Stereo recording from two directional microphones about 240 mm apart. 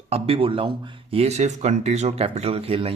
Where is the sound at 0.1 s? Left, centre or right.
Right.